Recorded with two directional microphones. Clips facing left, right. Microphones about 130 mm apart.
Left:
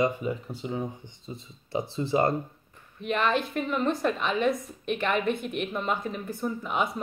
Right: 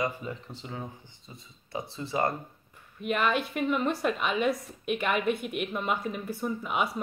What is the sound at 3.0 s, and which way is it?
A woman's voice, 5° right (ahead or behind).